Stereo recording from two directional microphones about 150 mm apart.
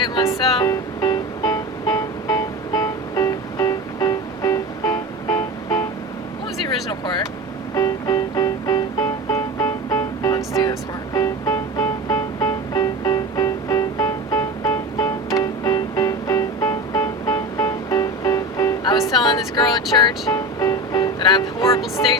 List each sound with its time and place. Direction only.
0.1 s music: 25° left (ahead or behind)
7.8 s music: 25° left (ahead or behind)